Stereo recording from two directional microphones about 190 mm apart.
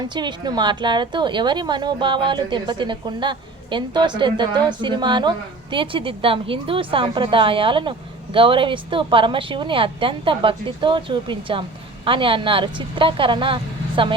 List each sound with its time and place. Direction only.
0.0 s a woman's voice: 25° right (ahead or behind)